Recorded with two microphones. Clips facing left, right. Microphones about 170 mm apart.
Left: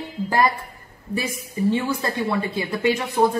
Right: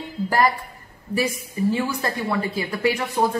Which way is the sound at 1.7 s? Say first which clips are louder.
Left 1 dB; 20° left (ahead or behind).